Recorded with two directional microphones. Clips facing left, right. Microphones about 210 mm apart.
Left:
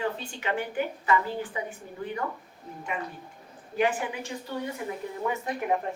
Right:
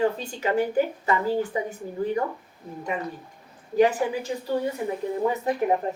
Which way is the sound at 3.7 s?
40° right (ahead or behind).